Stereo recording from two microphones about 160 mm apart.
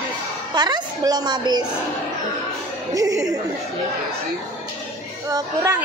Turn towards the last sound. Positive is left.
turn(degrees=-20)  # may be behind; listen again after turning